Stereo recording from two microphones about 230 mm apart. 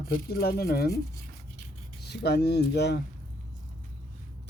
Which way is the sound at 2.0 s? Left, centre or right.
Left.